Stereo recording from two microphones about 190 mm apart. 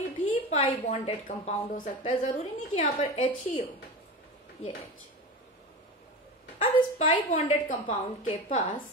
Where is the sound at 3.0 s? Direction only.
30° left (ahead or behind).